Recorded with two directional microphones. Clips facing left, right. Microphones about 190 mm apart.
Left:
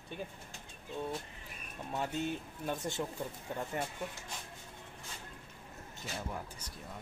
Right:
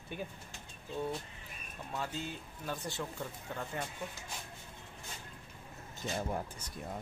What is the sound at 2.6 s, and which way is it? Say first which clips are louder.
Speech: left 3 dB; 20° left (ahead or behind).